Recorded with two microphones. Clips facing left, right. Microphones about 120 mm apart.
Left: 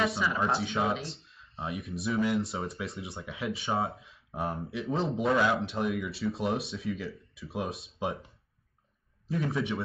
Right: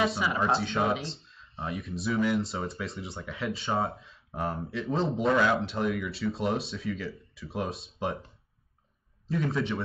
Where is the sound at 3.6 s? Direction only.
Centre (ahead or behind).